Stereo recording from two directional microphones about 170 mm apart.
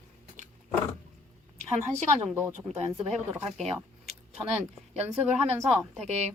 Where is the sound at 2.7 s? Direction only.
40° right (ahead or behind).